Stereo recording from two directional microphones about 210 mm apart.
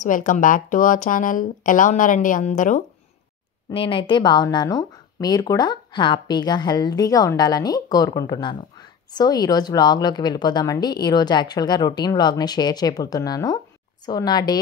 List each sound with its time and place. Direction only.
0.0 s speech: 40° left (ahead or behind)
3.7 s speech: 25° left (ahead or behind)